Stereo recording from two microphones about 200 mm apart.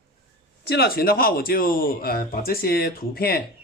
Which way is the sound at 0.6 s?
50° left (ahead or behind).